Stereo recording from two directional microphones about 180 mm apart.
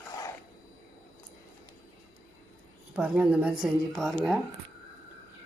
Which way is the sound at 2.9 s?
5° right (ahead or behind).